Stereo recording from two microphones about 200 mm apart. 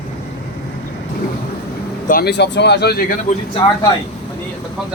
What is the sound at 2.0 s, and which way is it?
Speech, 50° left (ahead or behind).